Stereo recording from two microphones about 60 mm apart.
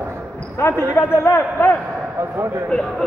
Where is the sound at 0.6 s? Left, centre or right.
Left.